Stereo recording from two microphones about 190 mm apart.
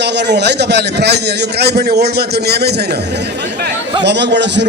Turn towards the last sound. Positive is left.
turn(degrees=-65)  # may be behind; listen again after turning